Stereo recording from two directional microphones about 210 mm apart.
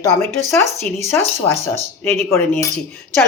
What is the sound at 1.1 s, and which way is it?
Speech, 10° left (ahead or behind).